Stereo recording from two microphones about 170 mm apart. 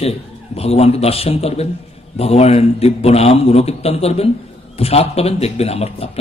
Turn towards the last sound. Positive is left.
turn(degrees=35)  # may be behind; listen again after turning